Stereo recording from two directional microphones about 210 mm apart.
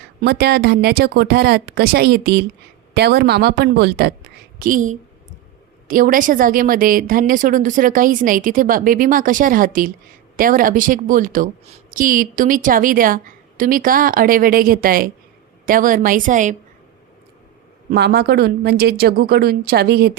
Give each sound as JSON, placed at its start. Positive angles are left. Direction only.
{"t": 0.2, "sound": "speech", "side_deg": -50}
{"t": 4.6, "sound": "a woman's voice", "side_deg": -40}
{"t": 17.9, "sound": "speech", "side_deg": -50}